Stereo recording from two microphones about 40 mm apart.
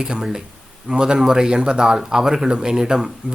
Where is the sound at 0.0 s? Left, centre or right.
Centre.